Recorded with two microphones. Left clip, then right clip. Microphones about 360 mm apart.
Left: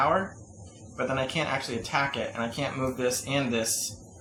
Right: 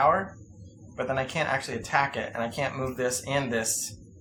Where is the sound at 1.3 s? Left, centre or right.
Centre.